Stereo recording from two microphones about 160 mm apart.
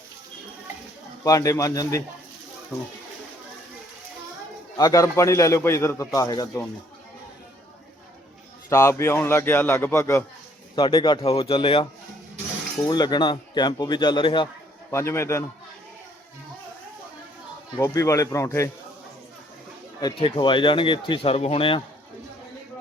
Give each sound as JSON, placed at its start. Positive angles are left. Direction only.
{"t": 1.2, "sound": "speech", "side_deg": 20}
{"t": 4.8, "sound": "speech", "side_deg": 20}
{"t": 8.7, "sound": "a man's voice", "side_deg": 15}
{"t": 10.8, "sound": "speech", "side_deg": 30}
{"t": 12.9, "sound": "speech", "side_deg": 25}
{"t": 14.8, "sound": "a man's voice", "side_deg": 15}
{"t": 17.7, "sound": "speech", "side_deg": 20}
{"t": 20.0, "sound": "speech", "side_deg": 30}